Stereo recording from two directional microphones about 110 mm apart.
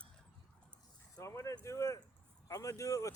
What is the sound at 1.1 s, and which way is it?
Speech, 30° left (ahead or behind).